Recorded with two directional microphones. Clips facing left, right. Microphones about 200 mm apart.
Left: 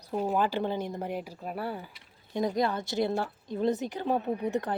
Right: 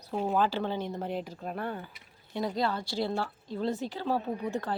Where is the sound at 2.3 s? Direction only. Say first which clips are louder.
Left 2 dB; 20° left (ahead or behind).